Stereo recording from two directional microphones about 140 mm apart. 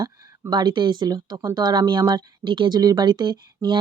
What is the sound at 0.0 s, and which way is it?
Speech, 30° right (ahead or behind).